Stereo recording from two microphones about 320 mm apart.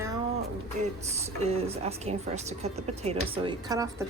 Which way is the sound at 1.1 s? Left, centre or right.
Centre.